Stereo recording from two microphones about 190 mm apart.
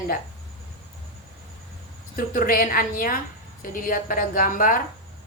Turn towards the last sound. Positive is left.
turn(degrees=45)  # may be behind; listen again after turning